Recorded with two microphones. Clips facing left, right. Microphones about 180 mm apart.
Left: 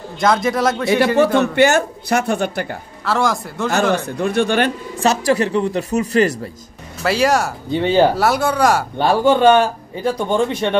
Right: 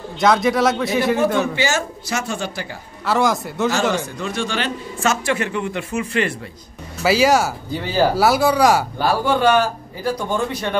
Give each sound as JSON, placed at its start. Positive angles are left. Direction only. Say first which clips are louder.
{"t": 0.2, "sound": "a man's voice", "louder": "even", "side_deg": 0}
{"t": 1.4, "sound": "speech", "louder": "left 7 dB", "side_deg": 60}
{"t": 3.1, "sound": "a man's voice", "louder": "even", "side_deg": 0}
{"t": 3.9, "sound": "speech", "louder": "left 6 dB", "side_deg": 60}
{"t": 4.9, "sound": "speech", "louder": "left 4 dB", "side_deg": 35}
{"t": 7.0, "sound": "a man's voice", "louder": "right 1 dB", "side_deg": 0}
{"t": 7.7, "sound": "speech", "louder": "left 5 dB", "side_deg": 25}
{"t": 8.2, "sound": "a man's voice", "louder": "right 1 dB", "side_deg": 0}
{"t": 8.9, "sound": "speech", "louder": "left 4 dB", "side_deg": 25}